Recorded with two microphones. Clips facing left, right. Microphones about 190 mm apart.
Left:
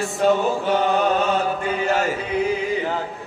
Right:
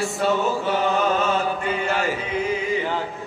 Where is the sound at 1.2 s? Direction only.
40° left (ahead or behind).